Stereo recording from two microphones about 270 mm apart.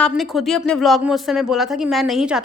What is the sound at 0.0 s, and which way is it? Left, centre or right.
Speech, centre.